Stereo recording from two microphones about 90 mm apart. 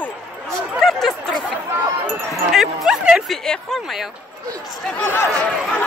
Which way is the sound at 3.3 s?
5° left (ahead or behind).